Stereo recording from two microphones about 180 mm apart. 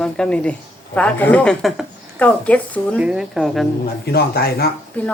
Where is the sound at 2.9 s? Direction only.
5° right (ahead or behind).